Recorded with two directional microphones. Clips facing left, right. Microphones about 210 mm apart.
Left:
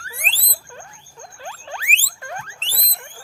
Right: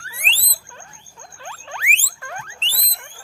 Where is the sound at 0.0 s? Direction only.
45° left (ahead or behind).